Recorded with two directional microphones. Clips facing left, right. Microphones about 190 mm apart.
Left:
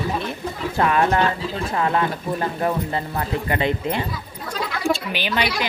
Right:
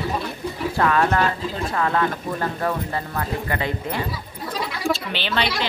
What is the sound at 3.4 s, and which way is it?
Speech, 20° left (ahead or behind).